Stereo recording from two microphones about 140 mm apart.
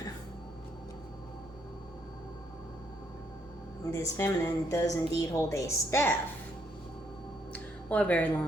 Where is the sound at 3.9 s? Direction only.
20° left (ahead or behind).